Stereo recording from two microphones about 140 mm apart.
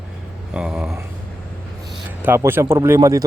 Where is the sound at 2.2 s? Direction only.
15° right (ahead or behind).